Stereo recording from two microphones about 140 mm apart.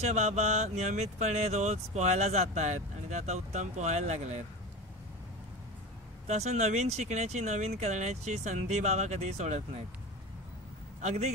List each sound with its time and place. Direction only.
0.1 s speech: 55° right (ahead or behind)
6.2 s speech: 55° right (ahead or behind)
11.0 s a man's voice: 55° right (ahead or behind)